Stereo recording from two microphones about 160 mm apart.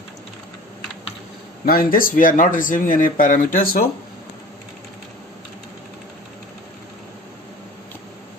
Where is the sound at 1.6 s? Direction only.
65° left (ahead or behind).